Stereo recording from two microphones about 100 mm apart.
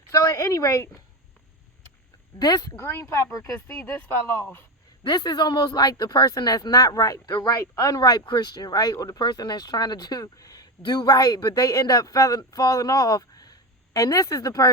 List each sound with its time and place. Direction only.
0.1 s a woman's voice: 30° left (ahead or behind)
2.4 s speech: 40° left (ahead or behind)
5.0 s speech: 45° left (ahead or behind)